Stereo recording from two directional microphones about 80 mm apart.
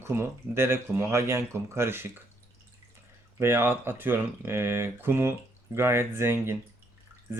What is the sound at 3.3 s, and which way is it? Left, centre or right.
Speech, right.